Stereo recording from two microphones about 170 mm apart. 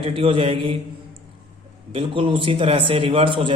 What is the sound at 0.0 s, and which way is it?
Speech, 30° right (ahead or behind).